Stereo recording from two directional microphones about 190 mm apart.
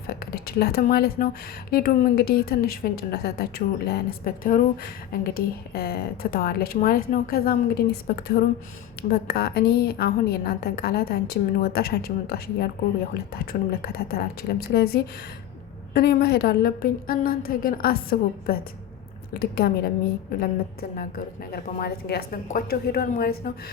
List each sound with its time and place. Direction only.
0.1 s a woman's voice: 55° left (ahead or behind)
21.5 s a woman's voice: 55° left (ahead or behind)